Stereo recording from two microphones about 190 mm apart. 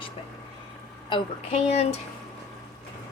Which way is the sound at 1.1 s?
30° left (ahead or behind).